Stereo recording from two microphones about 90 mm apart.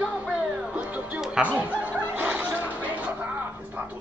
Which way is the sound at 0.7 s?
15° right (ahead or behind).